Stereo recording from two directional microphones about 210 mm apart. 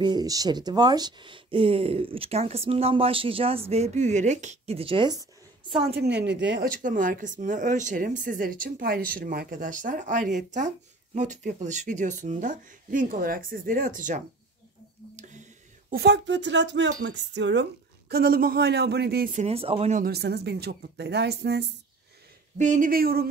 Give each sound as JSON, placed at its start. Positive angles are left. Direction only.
{"t": 0.0, "sound": "speech", "side_deg": -20}
{"t": 5.9, "sound": "speech", "side_deg": -55}
{"t": 6.8, "sound": "speech", "side_deg": -40}
{"t": 15.1, "sound": "whispering", "side_deg": -35}
{"t": 15.9, "sound": "speech", "side_deg": -50}
{"t": 19.4, "sound": "speech", "side_deg": -25}
{"t": 20.1, "sound": "speech", "side_deg": -50}
{"t": 22.6, "sound": "speech", "side_deg": -40}